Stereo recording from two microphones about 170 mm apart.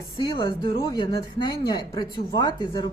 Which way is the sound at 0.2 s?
25° left (ahead or behind).